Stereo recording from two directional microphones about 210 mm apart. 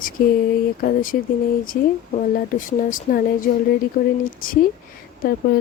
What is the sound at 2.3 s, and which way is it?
Speech, 40° left (ahead or behind).